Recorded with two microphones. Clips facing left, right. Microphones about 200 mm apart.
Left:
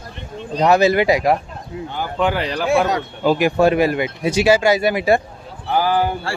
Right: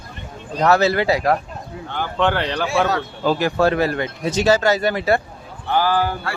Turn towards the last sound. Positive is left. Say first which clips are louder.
# left 1 dB
turn(degrees=15)  # may be behind; listen again after turning